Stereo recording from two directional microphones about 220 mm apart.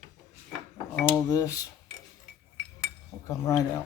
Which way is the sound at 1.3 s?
15° left (ahead or behind).